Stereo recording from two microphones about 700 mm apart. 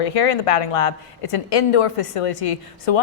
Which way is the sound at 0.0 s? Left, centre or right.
Left.